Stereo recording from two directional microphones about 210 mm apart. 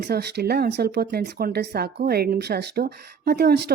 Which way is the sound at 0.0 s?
50° right (ahead or behind).